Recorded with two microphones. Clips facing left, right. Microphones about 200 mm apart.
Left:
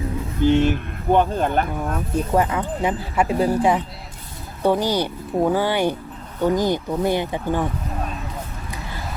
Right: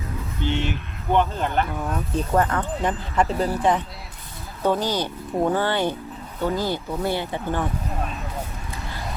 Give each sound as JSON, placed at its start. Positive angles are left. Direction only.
{"t": 0.4, "sound": "speech", "side_deg": 45}
{"t": 2.3, "sound": "speech", "side_deg": 10}